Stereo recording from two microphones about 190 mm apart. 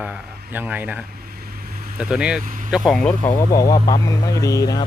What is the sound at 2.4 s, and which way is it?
Speech, 45° right (ahead or behind).